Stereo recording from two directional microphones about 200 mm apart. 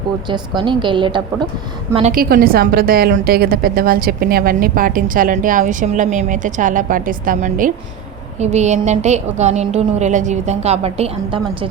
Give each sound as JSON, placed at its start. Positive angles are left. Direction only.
{"t": 0.3, "sound": "a woman's voice", "side_deg": -25}
{"t": 2.1, "sound": "a woman's voice", "side_deg": -45}